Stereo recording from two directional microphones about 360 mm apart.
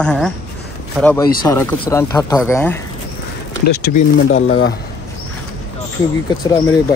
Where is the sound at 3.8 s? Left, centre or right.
Left.